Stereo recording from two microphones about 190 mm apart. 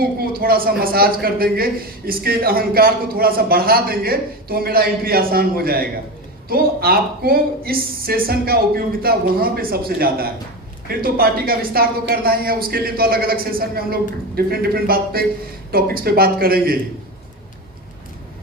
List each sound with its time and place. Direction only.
0.0 s speech: 50° right (ahead or behind)